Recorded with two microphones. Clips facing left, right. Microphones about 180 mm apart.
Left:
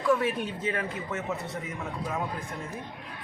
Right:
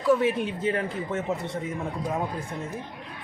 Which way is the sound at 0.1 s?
25° right (ahead or behind).